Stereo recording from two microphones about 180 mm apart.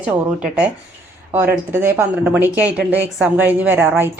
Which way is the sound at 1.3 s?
15° right (ahead or behind).